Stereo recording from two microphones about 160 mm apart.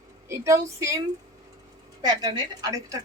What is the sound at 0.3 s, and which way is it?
A woman's voice, 20° right (ahead or behind).